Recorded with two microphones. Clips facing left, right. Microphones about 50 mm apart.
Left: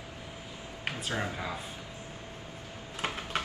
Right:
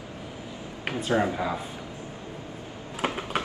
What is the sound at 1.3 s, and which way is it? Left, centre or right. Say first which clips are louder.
Speech: right 8 dB; centre.